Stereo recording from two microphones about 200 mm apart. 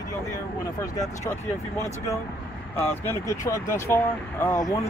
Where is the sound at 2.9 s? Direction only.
15° left (ahead or behind).